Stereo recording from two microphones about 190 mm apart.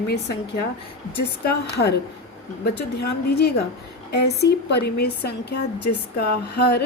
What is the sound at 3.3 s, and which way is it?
A woman's voice, 55° left (ahead or behind).